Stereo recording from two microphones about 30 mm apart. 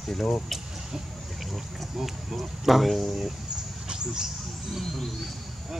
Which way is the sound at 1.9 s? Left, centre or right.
Centre.